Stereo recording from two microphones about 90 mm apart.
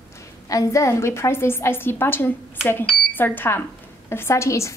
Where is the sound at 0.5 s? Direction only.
35° left (ahead or behind).